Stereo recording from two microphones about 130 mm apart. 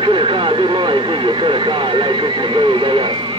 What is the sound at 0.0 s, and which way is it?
Vehicle, 40° right (ahead or behind).